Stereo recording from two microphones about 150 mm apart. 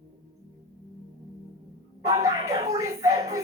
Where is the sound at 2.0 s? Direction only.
20° right (ahead or behind).